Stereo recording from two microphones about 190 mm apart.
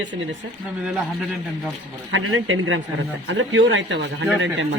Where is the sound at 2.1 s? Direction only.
90° right.